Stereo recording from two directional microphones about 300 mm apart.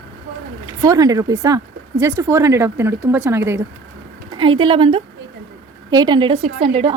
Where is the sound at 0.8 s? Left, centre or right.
Centre.